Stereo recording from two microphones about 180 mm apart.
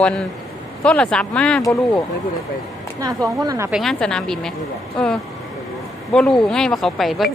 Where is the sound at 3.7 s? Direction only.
Centre (ahead or behind).